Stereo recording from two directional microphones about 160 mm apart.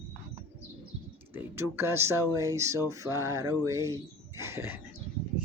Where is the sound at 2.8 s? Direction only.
20° right (ahead or behind).